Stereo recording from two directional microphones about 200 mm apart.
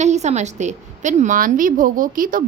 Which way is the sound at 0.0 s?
35° right (ahead or behind).